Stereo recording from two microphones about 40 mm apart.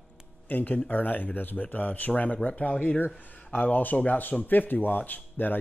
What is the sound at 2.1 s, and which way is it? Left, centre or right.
Speech, left.